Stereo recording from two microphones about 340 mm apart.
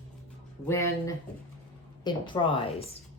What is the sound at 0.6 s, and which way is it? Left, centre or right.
A woman's voice, centre.